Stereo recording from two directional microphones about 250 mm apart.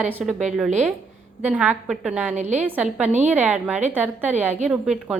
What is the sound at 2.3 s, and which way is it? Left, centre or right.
Speech, right.